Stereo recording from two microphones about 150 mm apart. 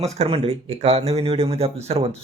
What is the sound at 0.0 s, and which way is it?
Speech, 40° right (ahead or behind).